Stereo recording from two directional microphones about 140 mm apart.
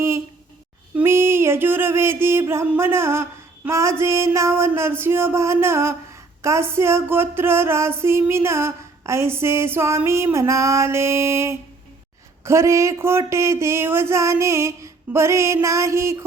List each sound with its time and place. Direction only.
0.9 s music: 20° right (ahead or behind)